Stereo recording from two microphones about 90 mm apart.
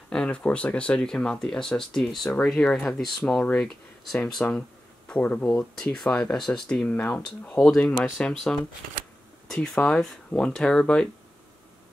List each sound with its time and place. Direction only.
0.1 s speech: 10° left (ahead or behind)